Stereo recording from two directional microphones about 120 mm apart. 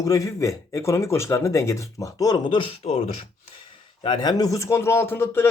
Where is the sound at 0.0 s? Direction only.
30° left (ahead or behind); by 2.9 s 45° left (ahead or behind).